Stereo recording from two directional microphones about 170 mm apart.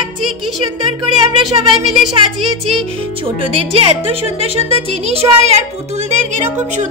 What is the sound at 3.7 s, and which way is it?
A child's voice, 35° right (ahead or behind).